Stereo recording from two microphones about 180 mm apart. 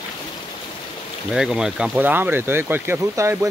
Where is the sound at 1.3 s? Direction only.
5° right (ahead or behind).